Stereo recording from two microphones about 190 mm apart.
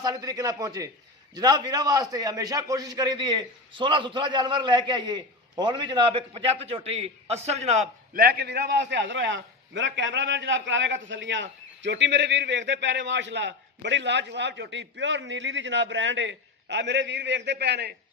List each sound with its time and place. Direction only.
0.0 s a man's voice: 20° right (ahead or behind); by 17.9 s 60° right (ahead or behind)